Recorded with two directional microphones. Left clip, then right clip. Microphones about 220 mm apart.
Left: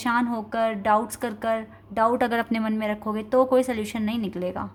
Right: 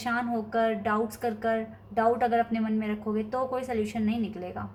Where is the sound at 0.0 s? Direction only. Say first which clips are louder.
Left 5 dB; 50° left (ahead or behind).